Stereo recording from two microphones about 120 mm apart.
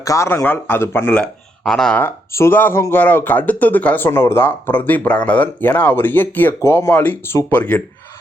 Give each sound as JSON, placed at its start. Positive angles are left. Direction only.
{"t": 0.0, "sound": "speech", "side_deg": 25}
{"t": 1.2, "sound": "speech", "side_deg": 5}
{"t": 2.0, "sound": "speech", "side_deg": 20}